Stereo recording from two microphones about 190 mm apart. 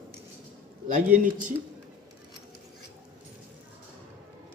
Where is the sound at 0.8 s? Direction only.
40° right (ahead or behind).